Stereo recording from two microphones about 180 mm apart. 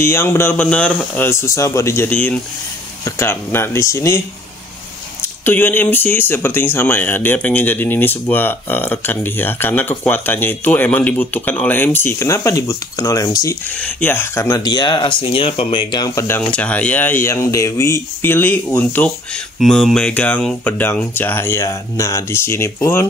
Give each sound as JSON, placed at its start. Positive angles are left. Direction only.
{"t": 0.0, "sound": "speech", "side_deg": 15}
{"t": 5.4, "sound": "speech", "side_deg": 10}